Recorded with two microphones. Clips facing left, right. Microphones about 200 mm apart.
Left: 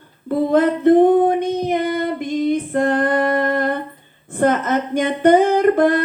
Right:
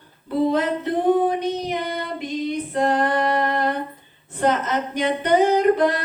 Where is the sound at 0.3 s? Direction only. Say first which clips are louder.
Left 4 dB; 50° left (ahead or behind).